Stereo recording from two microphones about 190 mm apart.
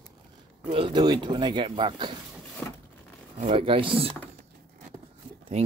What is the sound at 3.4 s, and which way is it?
Speech, 30° right (ahead or behind).